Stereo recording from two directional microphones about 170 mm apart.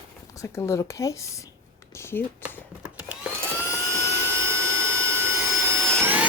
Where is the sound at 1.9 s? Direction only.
15° left (ahead or behind).